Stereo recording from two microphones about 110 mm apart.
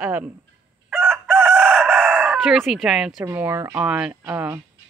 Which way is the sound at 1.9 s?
10° right (ahead or behind).